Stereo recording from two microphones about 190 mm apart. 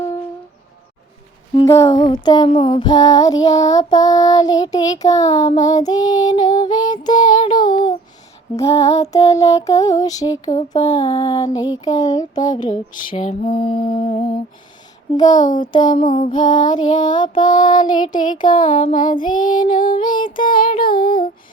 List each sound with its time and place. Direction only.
1.6 s music: 15° left (ahead or behind)
12.7 s lullaby: 35° left (ahead or behind)
15.1 s music: 20° left (ahead or behind)
16.0 s music: 45° left (ahead or behind)
16.3 s music: 25° left (ahead or behind)
18.8 s lullaby: 40° left (ahead or behind)
19.1 s music: 25° left (ahead or behind)
19.4 s music: 45° left (ahead or behind)
20.0 s music: 25° left (ahead or behind)
20.5 s music: 50° left (ahead or behind)